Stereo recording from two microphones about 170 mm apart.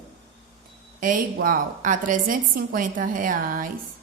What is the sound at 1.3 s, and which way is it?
A woman's voice, 55° right (ahead or behind).